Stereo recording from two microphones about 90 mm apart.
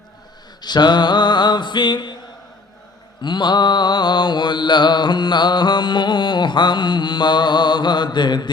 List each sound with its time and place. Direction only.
0.6 s mantra: 55° left (ahead or behind)
3.2 s mantra: 60° left (ahead or behind)